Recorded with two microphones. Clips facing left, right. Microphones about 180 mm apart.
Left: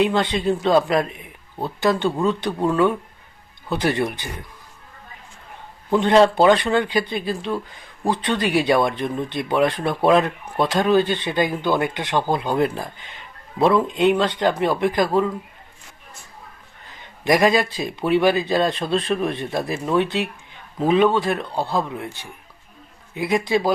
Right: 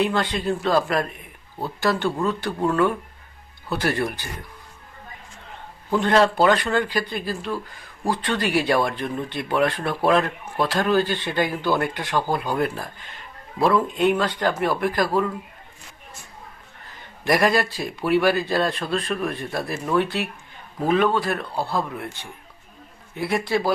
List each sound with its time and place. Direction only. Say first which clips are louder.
0.0 s speech: left 3 dB; 20° left (ahead or behind)
5.9 s speech: left 4 dB; 20° left (ahead or behind)
17.5 s a man's voice: left 2 dB; 20° left (ahead or behind)